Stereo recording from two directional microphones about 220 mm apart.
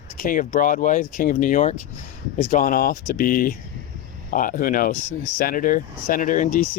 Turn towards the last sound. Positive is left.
turn(degrees=35)  # may be behind; listen again after turning